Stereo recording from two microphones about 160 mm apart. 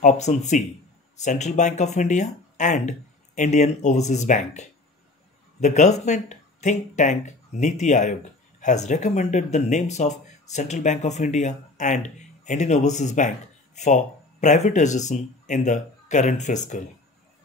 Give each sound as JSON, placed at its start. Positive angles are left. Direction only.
{"t": 0.0, "sound": "speech", "side_deg": 45}